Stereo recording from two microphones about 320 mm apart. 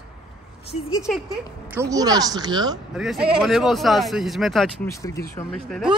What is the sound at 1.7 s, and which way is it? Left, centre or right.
A woman's voice, centre.